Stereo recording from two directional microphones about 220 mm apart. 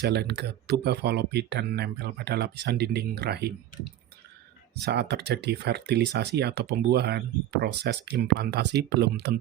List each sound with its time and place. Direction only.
0.0 s speech: 50° right (ahead or behind)
4.9 s speech: 50° right (ahead or behind)